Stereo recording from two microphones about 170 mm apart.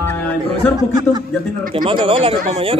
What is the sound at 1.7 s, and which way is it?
Speech, 30° right (ahead or behind).